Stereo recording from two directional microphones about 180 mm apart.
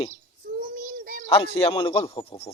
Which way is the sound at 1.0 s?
50° right (ahead or behind).